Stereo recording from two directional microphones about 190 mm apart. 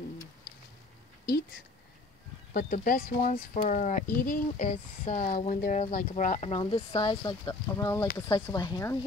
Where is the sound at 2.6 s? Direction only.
45° left (ahead or behind).